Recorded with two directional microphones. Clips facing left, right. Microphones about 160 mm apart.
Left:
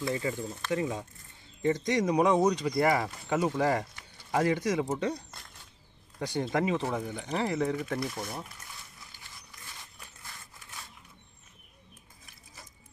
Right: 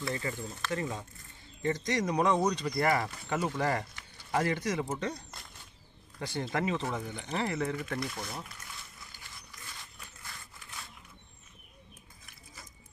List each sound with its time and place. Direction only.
0.0 s speech: 10° left (ahead or behind)